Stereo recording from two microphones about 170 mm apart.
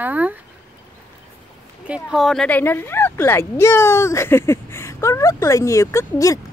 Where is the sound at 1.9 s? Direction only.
5° right (ahead or behind); by 6.4 s 20° left (ahead or behind).